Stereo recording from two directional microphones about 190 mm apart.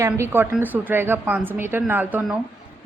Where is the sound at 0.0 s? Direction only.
15° right (ahead or behind).